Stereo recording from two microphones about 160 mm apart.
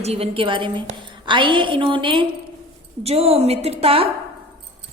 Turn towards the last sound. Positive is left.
turn(degrees=-35)  # may be behind; listen again after turning